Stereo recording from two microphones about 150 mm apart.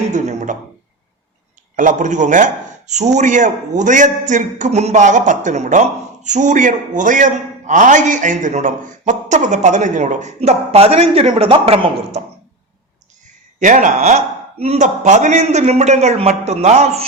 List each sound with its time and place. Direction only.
0.1 s a man's voice: 55° right (ahead or behind)
1.7 s a man's voice: 60° right (ahead or behind); by 12.2 s 40° right (ahead or behind)
13.2 s a sound: 60° right (ahead or behind)
14.6 s a man's voice: 50° right (ahead or behind)